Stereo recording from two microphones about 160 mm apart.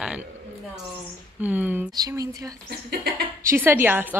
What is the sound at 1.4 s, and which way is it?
Speech, 10° right (ahead or behind).